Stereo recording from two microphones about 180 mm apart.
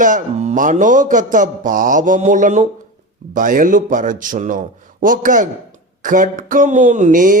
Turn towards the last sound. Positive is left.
turn(degrees=-45)  # may be behind; listen again after turning